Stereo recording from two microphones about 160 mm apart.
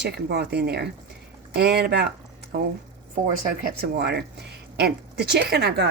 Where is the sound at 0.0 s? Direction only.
90° right.